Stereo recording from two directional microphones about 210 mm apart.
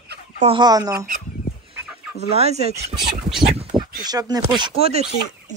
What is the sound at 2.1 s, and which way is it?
Speech, 30° right (ahead or behind).